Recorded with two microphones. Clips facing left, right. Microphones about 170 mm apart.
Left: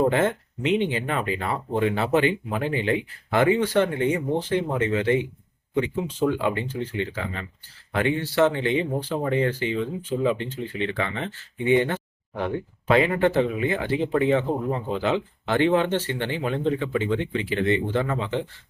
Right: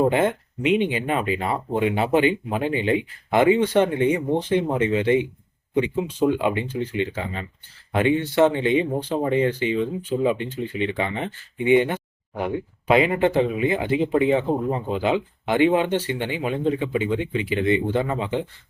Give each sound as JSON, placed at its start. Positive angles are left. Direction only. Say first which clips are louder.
{"t": 0.1, "sound": "speech", "louder": "right 2 dB", "side_deg": -15}